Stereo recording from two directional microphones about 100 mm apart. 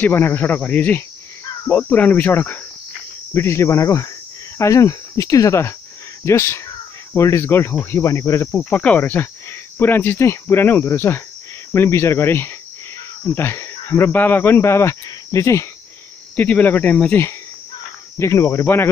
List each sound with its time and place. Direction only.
0.0 s speech: 20° left (ahead or behind)
1.7 s cricket: 15° left (ahead or behind)
3.3 s speech: 25° left (ahead or behind)
8.5 s cricket: 15° left (ahead or behind)
9.8 s speech: 20° left (ahead or behind)
16.3 s cricket: 15° left (ahead or behind)
18.2 s speech: 30° left (ahead or behind)